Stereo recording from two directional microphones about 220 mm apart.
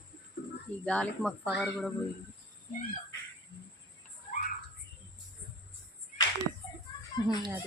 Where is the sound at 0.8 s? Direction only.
5° left (ahead or behind).